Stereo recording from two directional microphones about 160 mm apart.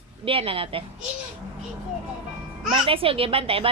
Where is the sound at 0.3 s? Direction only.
35° right (ahead or behind).